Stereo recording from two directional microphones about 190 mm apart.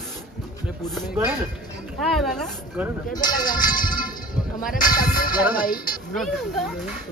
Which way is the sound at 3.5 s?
45° left (ahead or behind).